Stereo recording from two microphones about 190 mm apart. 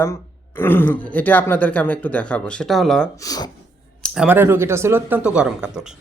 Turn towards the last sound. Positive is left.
turn(degrees=-5)  # may be behind; listen again after turning